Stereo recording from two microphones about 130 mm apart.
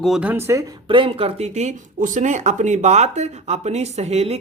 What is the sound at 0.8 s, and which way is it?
Speech, 40° right (ahead or behind).